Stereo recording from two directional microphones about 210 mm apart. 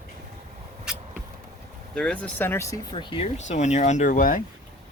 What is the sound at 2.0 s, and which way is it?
Speech, 5° left (ahead or behind).